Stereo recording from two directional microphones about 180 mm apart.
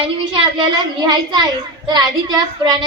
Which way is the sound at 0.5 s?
25° right (ahead or behind).